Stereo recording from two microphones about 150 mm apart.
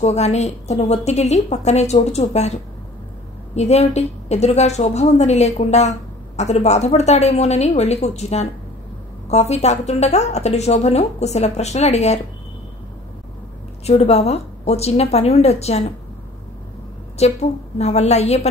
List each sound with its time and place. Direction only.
0.0 s a woman's voice: 45° left (ahead or behind)
13.8 s a woman's voice: 45° left (ahead or behind)
17.2 s a woman's voice: 45° left (ahead or behind)